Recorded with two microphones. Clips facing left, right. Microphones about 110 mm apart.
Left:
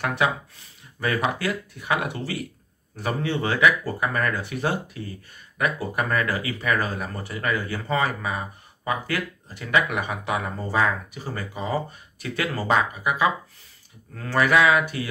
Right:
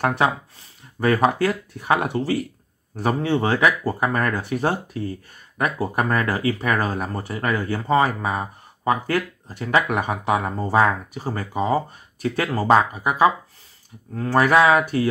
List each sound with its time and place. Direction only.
0.2 s speech: 35° right (ahead or behind)